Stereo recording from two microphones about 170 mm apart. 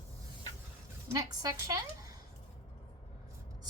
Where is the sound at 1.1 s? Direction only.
20° right (ahead or behind).